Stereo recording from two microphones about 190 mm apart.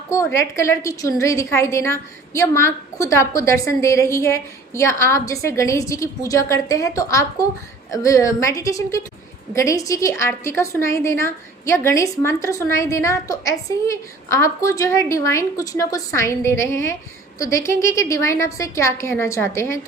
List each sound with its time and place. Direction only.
0.1 s a woman's voice: 15° left (ahead or behind)